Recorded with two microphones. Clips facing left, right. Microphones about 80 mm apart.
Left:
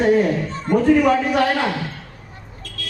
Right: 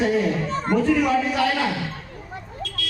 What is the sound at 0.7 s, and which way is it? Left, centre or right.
Speech, right.